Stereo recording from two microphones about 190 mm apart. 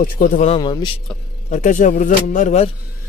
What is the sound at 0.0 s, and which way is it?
Speech, 45° left (ahead or behind).